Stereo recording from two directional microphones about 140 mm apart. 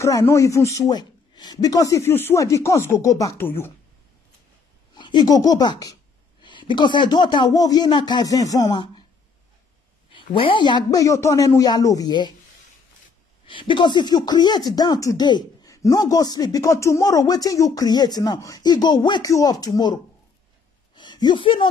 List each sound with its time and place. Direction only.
0.0 s speech: 20° left (ahead or behind)
4.9 s speech: 30° left (ahead or behind)
10.1 s speech: 40° left (ahead or behind)
13.5 s speech: 35° left (ahead or behind)
20.9 s a sound: 30° left (ahead or behind)